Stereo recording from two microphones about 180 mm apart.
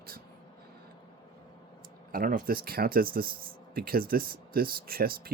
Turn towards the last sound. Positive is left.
turn(degrees=-55)  # may be behind; listen again after turning